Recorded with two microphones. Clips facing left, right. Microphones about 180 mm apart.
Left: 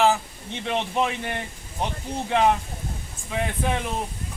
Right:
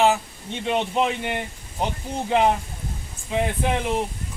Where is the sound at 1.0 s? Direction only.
15° right (ahead or behind).